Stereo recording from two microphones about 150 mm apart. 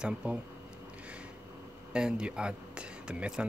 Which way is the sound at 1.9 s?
5° right (ahead or behind).